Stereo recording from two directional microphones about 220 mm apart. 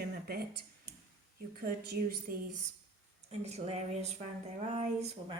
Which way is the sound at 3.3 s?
30° right (ahead or behind).